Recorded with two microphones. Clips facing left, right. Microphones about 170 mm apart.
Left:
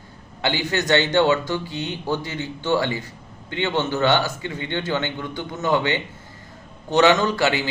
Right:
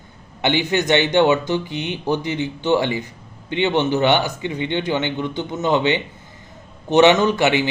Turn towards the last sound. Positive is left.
turn(degrees=-20)  # may be behind; listen again after turning